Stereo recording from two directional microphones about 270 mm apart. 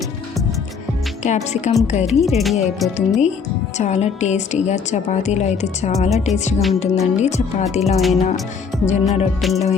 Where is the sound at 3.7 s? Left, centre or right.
Left.